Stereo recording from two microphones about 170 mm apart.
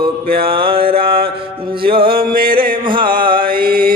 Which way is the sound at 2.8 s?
30° right (ahead or behind).